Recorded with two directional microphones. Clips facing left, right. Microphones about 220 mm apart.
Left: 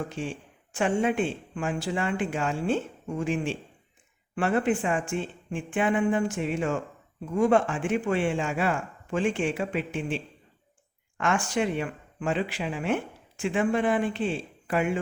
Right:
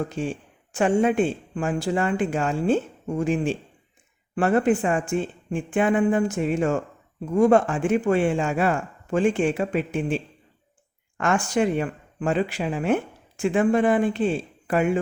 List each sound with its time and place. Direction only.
0.2 s speech: 40° right (ahead or behind)
11.2 s speech: 40° right (ahead or behind)